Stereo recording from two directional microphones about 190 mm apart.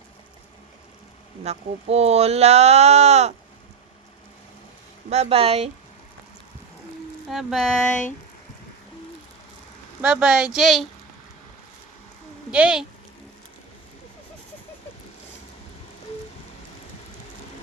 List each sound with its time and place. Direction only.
1.5 s speech: 35° right (ahead or behind)
5.0 s speech: 35° right (ahead or behind)
7.3 s speech: centre (ahead or behind)
10.0 s speech: 5° right (ahead or behind)
12.5 s speech: 5° right (ahead or behind)